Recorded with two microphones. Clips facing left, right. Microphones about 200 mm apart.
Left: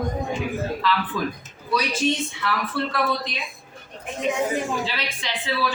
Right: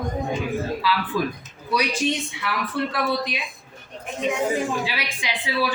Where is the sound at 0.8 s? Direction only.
10° right (ahead or behind).